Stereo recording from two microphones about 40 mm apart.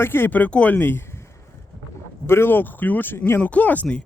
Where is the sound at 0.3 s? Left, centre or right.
Left.